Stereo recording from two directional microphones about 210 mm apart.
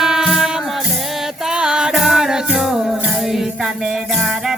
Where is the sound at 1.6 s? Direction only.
5° right (ahead or behind).